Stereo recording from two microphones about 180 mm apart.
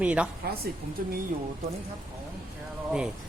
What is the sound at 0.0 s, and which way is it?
Speech, 5° right (ahead or behind).